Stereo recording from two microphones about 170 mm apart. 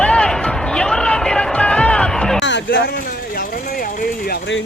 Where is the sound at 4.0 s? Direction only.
60° left (ahead or behind).